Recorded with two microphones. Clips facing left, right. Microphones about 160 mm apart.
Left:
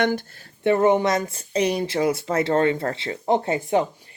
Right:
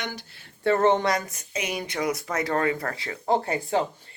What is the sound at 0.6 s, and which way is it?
Speech, 15° left (ahead or behind).